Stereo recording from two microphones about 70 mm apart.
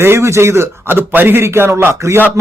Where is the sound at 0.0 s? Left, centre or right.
Right.